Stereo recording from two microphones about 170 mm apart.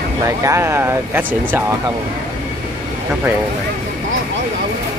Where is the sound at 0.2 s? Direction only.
20° right (ahead or behind).